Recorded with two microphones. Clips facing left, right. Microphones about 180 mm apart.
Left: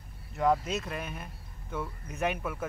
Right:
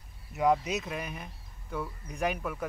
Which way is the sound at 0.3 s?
Centre (ahead or behind).